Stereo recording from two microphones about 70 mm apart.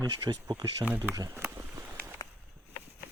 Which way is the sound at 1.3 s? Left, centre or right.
Right.